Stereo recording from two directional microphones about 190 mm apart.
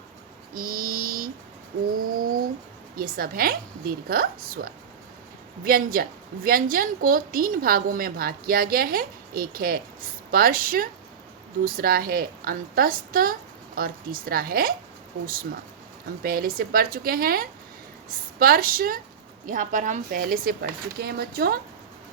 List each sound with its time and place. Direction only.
0.5 s a sound: 50° right (ahead or behind)
2.9 s a woman's voice: 50° right (ahead or behind)
16.2 s a woman's voice: 50° right (ahead or behind)